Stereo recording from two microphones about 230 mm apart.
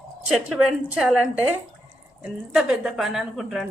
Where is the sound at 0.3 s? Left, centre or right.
Centre.